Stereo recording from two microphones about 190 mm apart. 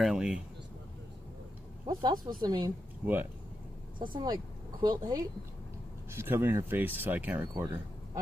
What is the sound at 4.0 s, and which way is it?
Speech, 25° right (ahead or behind).